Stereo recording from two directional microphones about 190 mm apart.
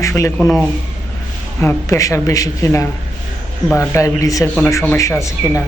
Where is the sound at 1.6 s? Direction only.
15° left (ahead or behind).